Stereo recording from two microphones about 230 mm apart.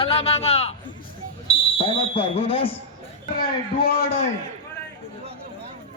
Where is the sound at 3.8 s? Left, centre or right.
Left.